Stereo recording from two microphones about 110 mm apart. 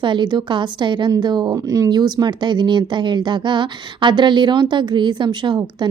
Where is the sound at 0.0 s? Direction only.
45° right (ahead or behind).